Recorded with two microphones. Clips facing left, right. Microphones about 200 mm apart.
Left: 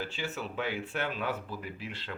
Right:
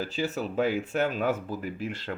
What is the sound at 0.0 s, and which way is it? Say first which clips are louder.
Speech: right 7 dB; 40° right (ahead or behind).